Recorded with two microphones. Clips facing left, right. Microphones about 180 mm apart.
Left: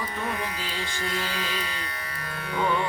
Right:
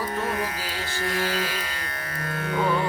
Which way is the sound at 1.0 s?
45° right (ahead or behind).